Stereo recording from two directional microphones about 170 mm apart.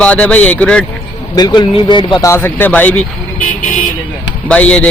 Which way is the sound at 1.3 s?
25° left (ahead or behind).